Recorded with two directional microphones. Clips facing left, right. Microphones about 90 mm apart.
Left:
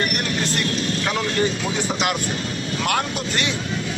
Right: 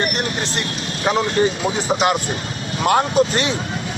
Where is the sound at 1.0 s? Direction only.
30° right (ahead or behind).